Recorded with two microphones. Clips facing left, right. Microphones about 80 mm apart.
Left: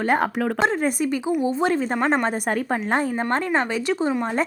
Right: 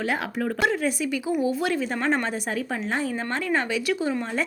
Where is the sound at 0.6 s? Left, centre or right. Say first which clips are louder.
Left 2 dB; left.